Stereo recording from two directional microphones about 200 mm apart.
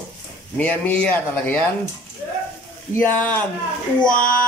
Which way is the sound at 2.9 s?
10° left (ahead or behind).